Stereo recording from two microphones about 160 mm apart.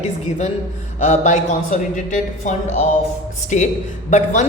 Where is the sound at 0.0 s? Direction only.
45° left (ahead or behind).